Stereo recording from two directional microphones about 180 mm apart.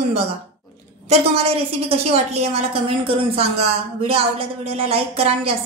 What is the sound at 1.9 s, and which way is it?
A woman's voice, 35° right (ahead or behind).